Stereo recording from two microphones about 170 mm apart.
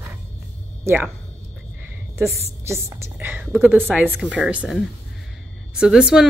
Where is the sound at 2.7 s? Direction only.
15° right (ahead or behind).